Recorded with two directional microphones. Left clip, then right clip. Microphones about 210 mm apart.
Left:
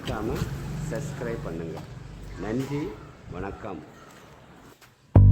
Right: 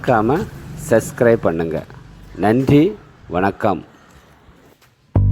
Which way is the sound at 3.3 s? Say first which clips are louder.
Right 19 dB; 40° right (ahead or behind).